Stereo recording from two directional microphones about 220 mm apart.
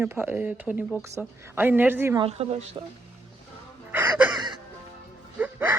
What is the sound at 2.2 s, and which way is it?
Speech, 25° right (ahead or behind).